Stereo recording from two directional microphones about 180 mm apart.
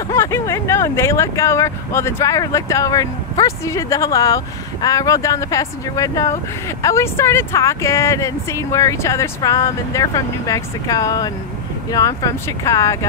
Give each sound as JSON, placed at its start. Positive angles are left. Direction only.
{"t": 0.1, "sound": "speech", "side_deg": 15}